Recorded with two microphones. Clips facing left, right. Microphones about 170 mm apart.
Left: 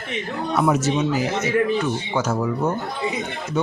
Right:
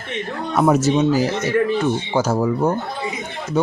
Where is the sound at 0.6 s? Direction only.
40° right (ahead or behind).